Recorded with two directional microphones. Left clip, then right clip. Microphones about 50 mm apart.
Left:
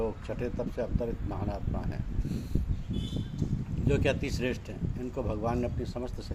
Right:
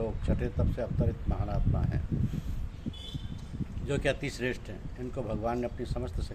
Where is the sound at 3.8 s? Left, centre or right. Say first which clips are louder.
Left 2 dB; right.